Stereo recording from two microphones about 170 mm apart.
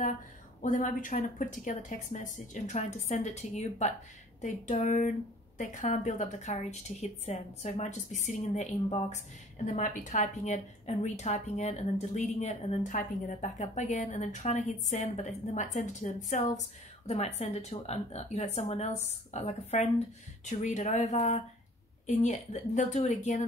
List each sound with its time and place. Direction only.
0.6 s a woman's voice: 50° left (ahead or behind)
9.7 s a woman's voice: 50° left (ahead or behind)